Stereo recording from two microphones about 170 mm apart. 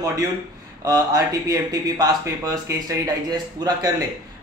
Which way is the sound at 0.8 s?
20° right (ahead or behind).